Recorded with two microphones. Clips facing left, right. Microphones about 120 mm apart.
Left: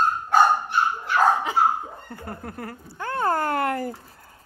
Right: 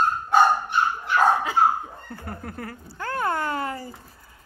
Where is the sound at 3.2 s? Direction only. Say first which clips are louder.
Left 5 dB; 45° left (ahead or behind); by 3.9 s 60° left (ahead or behind).